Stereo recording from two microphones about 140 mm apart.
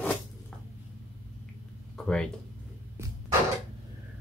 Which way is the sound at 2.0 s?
5° left (ahead or behind).